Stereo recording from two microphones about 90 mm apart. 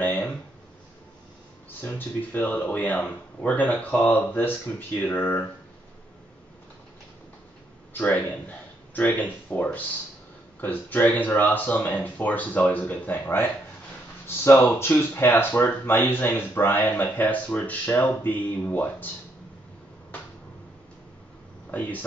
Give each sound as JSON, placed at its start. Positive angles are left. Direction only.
{"t": 0.0, "sound": "a sound", "side_deg": 20}
{"t": 1.8, "sound": "speech", "side_deg": 20}
{"t": 8.0, "sound": "speech", "side_deg": 20}
{"t": 21.6, "sound": "speech", "side_deg": 20}